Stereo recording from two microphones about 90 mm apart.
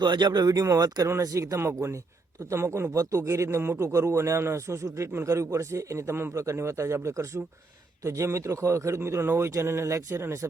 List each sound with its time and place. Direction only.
0.0 s a man's voice: 55° right (ahead or behind); by 10.5 s 30° right (ahead or behind)